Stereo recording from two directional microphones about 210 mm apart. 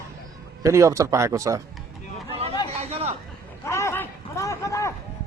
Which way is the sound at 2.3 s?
30° right (ahead or behind).